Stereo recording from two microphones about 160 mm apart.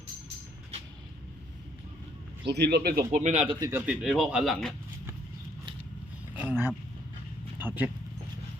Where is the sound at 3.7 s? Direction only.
5° right (ahead or behind).